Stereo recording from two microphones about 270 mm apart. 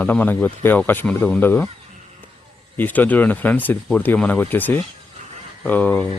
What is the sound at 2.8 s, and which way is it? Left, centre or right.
Speech, centre.